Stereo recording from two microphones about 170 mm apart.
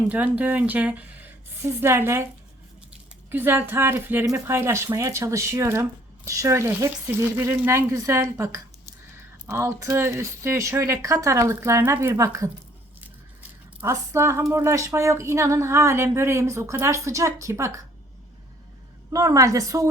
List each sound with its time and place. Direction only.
0.1 s speech: 10° right (ahead or behind)
3.2 s speech: 10° right (ahead or behind)
13.8 s speech: 15° right (ahead or behind)
19.1 s a woman's voice: 20° right (ahead or behind)